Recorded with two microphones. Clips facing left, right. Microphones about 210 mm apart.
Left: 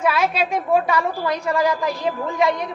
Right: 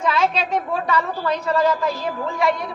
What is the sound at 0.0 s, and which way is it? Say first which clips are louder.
A woman's voice: left 1 dB; 10° left (ahead or behind).